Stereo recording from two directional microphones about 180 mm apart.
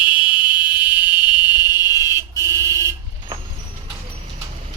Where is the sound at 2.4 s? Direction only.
15° right (ahead or behind).